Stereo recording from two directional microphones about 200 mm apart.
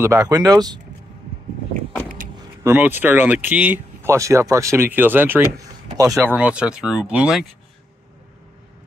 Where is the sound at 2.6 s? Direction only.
10° right (ahead or behind).